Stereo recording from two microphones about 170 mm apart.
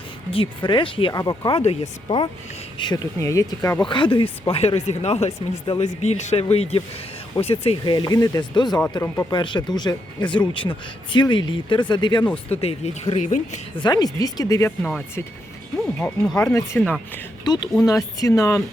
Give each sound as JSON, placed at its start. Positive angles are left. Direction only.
{"t": 0.3, "sound": "speech", "side_deg": 30}
{"t": 3.8, "sound": "speech", "side_deg": 30}
{"t": 12.5, "sound": "speech", "side_deg": 40}
{"t": 13.7, "sound": "speech", "side_deg": 25}
{"t": 14.8, "sound": "speech", "side_deg": 5}
{"t": 16.4, "sound": "speech", "side_deg": 15}